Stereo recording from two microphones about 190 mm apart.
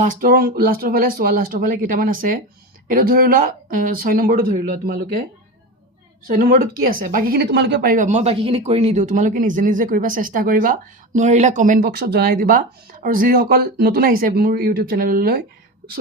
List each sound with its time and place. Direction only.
0.0 s a woman's voice: 45° right (ahead or behind)
6.2 s a woman's voice: 45° right (ahead or behind)